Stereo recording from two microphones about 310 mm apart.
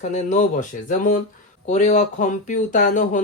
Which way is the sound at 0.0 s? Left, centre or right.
Left.